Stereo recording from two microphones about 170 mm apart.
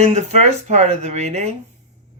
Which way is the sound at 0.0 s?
40° right (ahead or behind).